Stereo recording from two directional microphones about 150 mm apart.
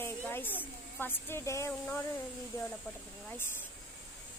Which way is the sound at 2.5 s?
20° left (ahead or behind).